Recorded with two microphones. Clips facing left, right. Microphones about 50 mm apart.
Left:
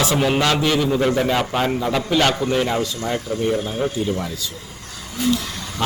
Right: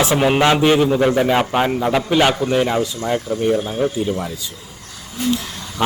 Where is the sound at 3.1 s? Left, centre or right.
Right.